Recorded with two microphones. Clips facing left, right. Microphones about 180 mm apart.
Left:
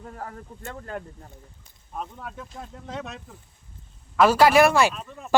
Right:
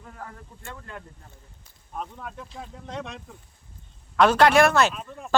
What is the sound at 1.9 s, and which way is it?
Speech, centre (ahead or behind).